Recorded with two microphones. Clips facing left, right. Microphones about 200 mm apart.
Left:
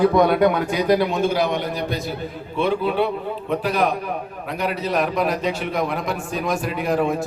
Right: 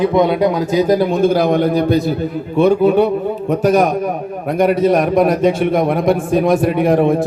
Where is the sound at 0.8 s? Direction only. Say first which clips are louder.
Right 9 dB; 45° right (ahead or behind).